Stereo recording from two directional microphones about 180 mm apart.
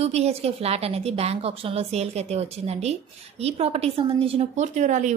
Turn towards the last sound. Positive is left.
turn(degrees=-40)  # may be behind; listen again after turning